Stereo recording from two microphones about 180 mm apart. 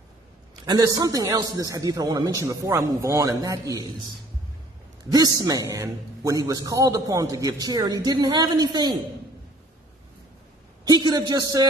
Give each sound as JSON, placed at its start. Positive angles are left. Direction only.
{"t": 0.7, "sound": "a man's voice", "side_deg": -20}
{"t": 5.1, "sound": "a man's voice", "side_deg": -20}
{"t": 10.9, "sound": "a man's voice", "side_deg": -25}